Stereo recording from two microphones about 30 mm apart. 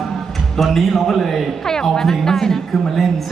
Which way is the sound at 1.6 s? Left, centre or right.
Centre.